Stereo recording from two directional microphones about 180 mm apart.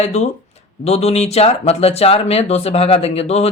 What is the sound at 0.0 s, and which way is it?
Speech, 35° left (ahead or behind).